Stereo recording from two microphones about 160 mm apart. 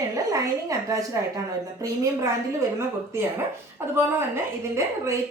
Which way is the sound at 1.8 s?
20° right (ahead or behind).